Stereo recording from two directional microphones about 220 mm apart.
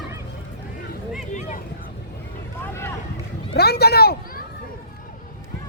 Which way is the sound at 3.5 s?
45° left (ahead or behind).